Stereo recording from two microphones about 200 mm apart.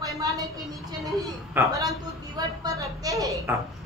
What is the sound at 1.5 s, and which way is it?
Speech, 15° right (ahead or behind).